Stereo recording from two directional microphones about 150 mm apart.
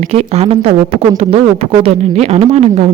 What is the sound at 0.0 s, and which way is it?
Speech, 45° right (ahead or behind).